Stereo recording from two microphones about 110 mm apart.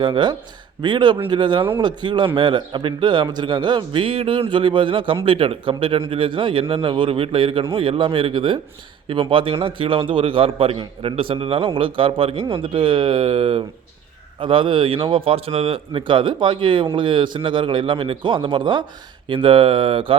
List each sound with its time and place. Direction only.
0.0 s a man's voice: 45° right (ahead or behind); by 15.8 s 70° right (ahead or behind)
15.9 s a man's voice: 50° right (ahead or behind)